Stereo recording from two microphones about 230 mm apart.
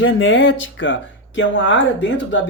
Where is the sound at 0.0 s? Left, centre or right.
Left.